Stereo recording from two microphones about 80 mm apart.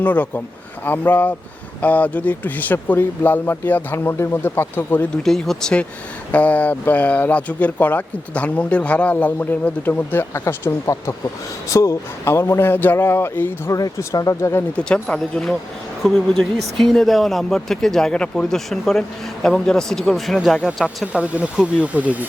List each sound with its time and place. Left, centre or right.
0.0 s speech: left
5.1 s speech: centre
6.3 s speech: centre
10.3 s speech: left
13.7 s speech: left
14.8 s speech: centre
21.1 s speech: centre